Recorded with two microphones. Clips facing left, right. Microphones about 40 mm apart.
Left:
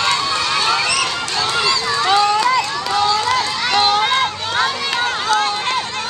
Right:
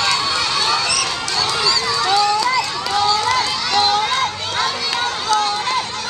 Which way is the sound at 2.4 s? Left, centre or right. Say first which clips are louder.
Left 2 dB; left.